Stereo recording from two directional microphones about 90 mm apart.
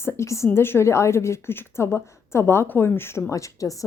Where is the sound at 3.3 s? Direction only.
35° left (ahead or behind).